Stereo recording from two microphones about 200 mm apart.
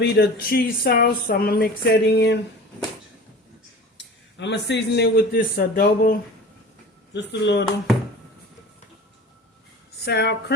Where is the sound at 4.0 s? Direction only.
60° left (ahead or behind).